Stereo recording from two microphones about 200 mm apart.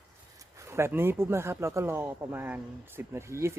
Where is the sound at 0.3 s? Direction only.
15° right (ahead or behind).